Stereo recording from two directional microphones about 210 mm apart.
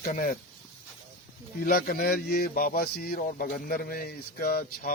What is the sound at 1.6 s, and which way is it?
Speech, 45° left (ahead or behind).